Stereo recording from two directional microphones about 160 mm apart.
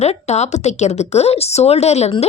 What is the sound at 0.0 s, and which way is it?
A woman's voice, 45° left (ahead or behind).